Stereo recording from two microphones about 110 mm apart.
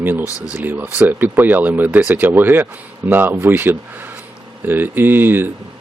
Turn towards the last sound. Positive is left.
turn(degrees=-20)  # may be behind; listen again after turning